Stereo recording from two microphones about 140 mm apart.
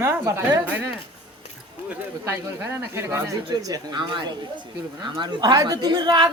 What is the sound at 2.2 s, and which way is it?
Speech, 15° right (ahead or behind).